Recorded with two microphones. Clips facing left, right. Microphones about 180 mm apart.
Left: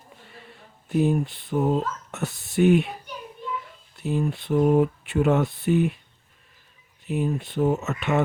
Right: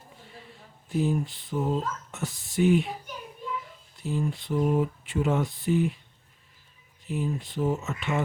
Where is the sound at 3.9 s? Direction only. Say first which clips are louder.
Left 4 dB; 65° left (ahead or behind).